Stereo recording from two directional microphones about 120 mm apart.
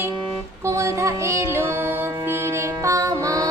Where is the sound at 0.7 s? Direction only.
25° right (ahead or behind).